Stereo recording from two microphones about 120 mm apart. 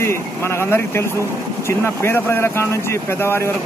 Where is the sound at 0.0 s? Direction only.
20° left (ahead or behind).